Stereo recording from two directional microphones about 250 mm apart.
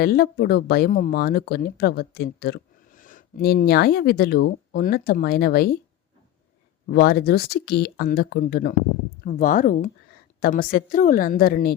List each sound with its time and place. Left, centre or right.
0.0 s speech: left
6.9 s speech: left